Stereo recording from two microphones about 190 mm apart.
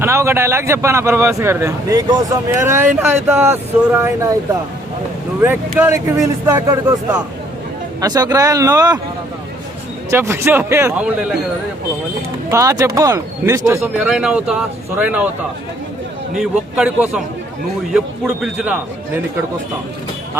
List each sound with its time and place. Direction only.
0.0 s a man's voice: 15° right (ahead or behind)
5.4 s a man's voice: 10° right (ahead or behind)
8.0 s speech: 20° right (ahead or behind)
10.1 s a man's voice: 15° right (ahead or behind)
12.5 s a man's voice: 15° right (ahead or behind)
14.0 s a man's voice: 5° right (ahead or behind)
16.4 s a man's voice: 5° right (ahead or behind)